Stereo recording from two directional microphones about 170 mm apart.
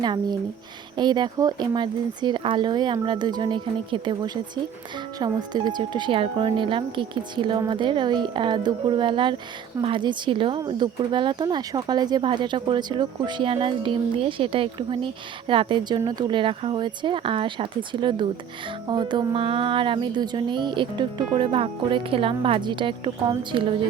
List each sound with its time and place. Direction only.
0.0 s speech: 25° right (ahead or behind)